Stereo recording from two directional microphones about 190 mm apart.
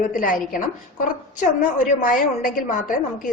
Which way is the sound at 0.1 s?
45° left (ahead or behind).